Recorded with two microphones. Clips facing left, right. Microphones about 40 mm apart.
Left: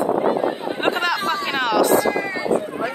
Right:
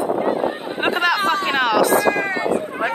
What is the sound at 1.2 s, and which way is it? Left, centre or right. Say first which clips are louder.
Speech: right 4 dB; right.